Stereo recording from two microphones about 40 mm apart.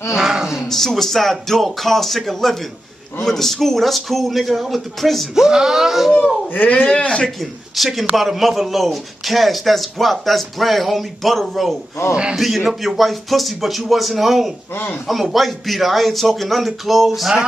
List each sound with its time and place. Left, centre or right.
0.3 s speech: centre
0.7 s a man's voice: centre
5.3 s speech: centre
6.5 s speech: left
7.0 s speech: left
7.2 s a man's voice: centre